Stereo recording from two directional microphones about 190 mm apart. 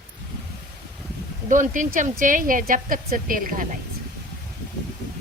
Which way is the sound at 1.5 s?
40° right (ahead or behind).